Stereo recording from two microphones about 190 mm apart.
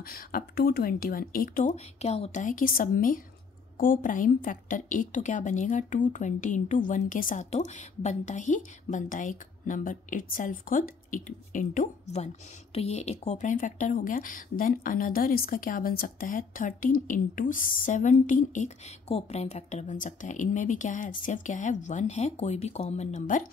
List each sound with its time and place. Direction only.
0.0 s a woman's voice: 50° left (ahead or behind)